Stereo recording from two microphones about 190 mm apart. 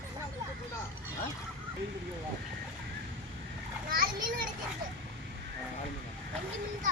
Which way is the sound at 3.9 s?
45° right (ahead or behind).